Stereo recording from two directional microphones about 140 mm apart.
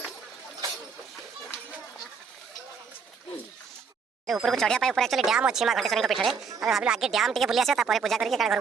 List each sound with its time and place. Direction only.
4.3 s speech: centre (ahead or behind)